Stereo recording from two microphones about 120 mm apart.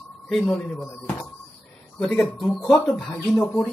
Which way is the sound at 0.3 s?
5° left (ahead or behind).